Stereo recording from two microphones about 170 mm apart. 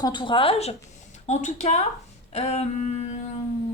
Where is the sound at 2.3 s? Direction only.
40° left (ahead or behind).